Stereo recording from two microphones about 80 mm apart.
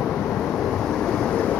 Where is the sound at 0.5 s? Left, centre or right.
Centre.